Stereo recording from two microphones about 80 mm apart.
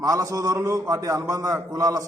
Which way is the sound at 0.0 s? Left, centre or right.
Right.